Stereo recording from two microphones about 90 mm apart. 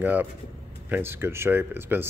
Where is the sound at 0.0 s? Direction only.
20° right (ahead or behind).